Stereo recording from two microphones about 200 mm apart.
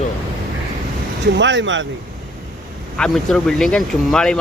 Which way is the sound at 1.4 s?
65° right (ahead or behind).